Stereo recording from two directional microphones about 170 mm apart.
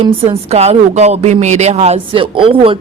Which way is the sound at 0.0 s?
35° right (ahead or behind).